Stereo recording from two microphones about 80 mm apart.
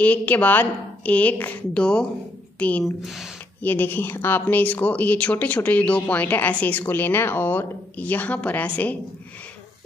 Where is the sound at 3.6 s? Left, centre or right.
Left.